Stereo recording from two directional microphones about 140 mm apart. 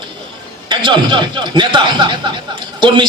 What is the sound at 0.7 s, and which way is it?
A man's voice, 35° right (ahead or behind).